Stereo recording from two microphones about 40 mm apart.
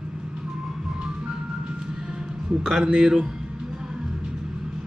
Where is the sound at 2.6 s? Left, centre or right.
Right.